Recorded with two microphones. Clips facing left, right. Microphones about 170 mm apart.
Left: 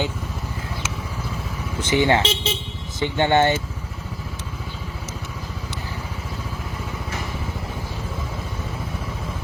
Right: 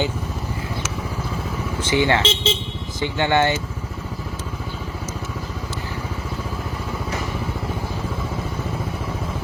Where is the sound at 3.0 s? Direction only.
20° left (ahead or behind).